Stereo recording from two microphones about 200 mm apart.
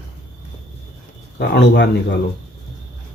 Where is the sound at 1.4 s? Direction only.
55° left (ahead or behind).